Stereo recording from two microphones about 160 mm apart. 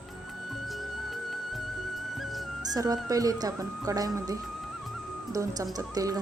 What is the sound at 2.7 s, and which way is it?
Speech, 20° right (ahead or behind).